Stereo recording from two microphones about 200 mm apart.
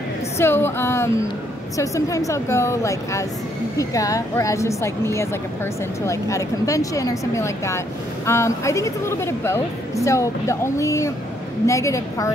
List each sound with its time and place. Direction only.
0.4 s a woman's voice: 10° left (ahead or behind)